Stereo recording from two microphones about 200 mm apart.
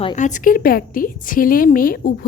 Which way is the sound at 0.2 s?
40° left (ahead or behind).